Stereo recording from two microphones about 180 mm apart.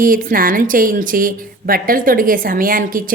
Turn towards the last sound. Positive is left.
turn(degrees=-50)  # may be behind; listen again after turning